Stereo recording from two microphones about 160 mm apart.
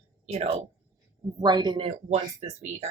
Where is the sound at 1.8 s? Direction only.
40° right (ahead or behind).